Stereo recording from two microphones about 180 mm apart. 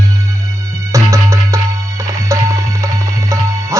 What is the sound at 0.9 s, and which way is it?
Music, 15° right (ahead or behind).